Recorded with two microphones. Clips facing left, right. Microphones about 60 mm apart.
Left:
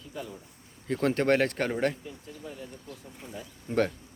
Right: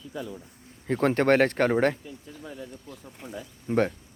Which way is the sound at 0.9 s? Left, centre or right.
Right.